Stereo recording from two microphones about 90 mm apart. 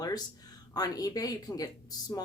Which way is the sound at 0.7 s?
45° left (ahead or behind).